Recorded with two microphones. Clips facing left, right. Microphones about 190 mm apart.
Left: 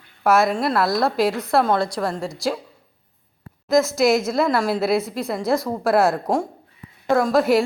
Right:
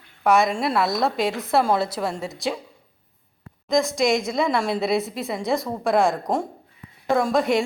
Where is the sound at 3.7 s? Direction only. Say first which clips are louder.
Left 3 dB; 5° left (ahead or behind).